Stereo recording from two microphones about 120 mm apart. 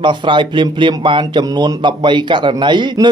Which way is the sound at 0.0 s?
40° right (ahead or behind).